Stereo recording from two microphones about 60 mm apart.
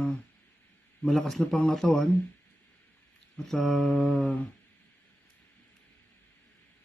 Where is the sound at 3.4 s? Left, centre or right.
Centre.